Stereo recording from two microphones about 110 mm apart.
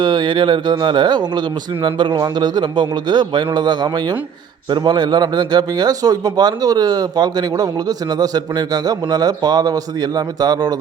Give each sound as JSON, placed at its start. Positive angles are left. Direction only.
{"t": 0.0, "sound": "a man's voice", "side_deg": -40}